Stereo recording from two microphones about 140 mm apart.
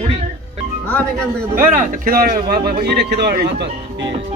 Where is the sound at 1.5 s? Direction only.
70° right (ahead or behind); by 3.4 s 90° right.